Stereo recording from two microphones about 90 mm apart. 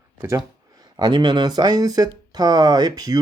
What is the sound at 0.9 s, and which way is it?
Speech, 55° right (ahead or behind).